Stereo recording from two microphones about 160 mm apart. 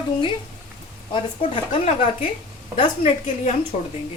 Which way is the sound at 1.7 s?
40° left (ahead or behind).